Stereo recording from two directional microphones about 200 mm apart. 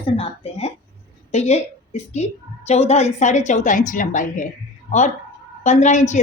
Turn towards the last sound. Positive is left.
turn(degrees=35)  # may be behind; listen again after turning